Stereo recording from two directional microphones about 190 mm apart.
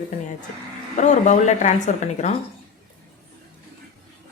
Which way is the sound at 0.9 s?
40° left (ahead or behind).